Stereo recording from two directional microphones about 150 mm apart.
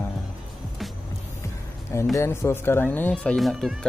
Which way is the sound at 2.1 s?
20° left (ahead or behind).